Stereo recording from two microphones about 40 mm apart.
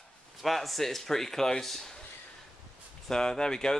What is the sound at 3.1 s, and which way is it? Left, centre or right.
Speech, centre.